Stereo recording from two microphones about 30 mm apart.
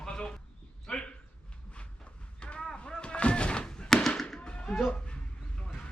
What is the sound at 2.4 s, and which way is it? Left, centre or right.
Artillery fire, left.